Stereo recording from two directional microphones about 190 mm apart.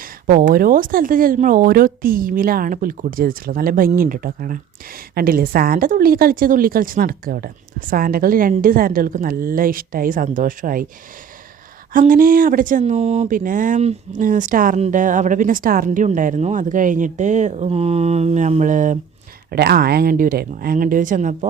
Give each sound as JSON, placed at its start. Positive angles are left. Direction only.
{"t": 0.0, "sound": "speech", "side_deg": -50}
{"t": 11.9, "sound": "speech", "side_deg": -45}
{"t": 19.5, "sound": "speech", "side_deg": -55}